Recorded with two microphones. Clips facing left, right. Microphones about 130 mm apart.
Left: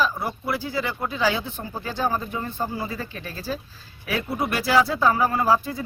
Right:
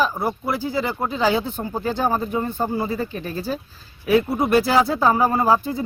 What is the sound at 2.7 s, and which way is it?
Speech, 25° right (ahead or behind).